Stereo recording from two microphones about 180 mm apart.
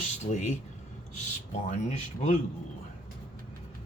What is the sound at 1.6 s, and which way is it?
Speech, 40° left (ahead or behind).